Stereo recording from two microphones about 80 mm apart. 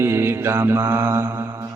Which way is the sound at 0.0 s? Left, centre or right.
Right.